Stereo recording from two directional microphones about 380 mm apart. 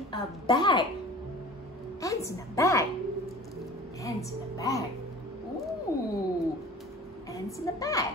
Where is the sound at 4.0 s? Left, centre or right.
Centre.